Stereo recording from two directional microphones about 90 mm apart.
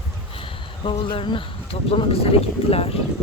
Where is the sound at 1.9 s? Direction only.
90° left.